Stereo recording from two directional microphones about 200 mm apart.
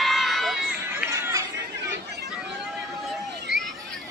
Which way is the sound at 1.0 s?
15° right (ahead or behind).